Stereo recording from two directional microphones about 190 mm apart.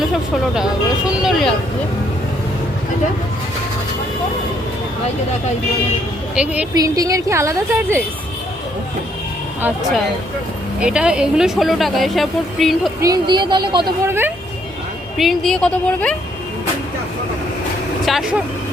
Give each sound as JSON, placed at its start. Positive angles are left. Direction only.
{"t": 0.5, "sound": "speech", "side_deg": -5}
{"t": 6.3, "sound": "a woman's voice", "side_deg": -5}
{"t": 6.7, "sound": "a woman's voice", "side_deg": -20}
{"t": 9.6, "sound": "a woman's voice", "side_deg": -10}
{"t": 13.0, "sound": "speech", "side_deg": -20}
{"t": 15.2, "sound": "speech", "side_deg": 0}
{"t": 18.0, "sound": "speech", "side_deg": 0}